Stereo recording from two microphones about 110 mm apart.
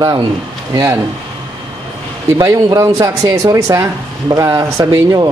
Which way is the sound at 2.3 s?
35° right (ahead or behind).